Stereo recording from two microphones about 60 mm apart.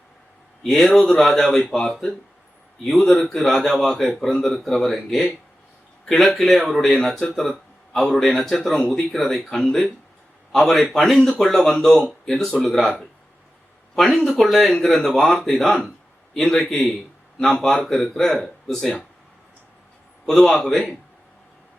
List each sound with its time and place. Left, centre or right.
0.6 s a man's voice: centre
20.2 s a man's voice: centre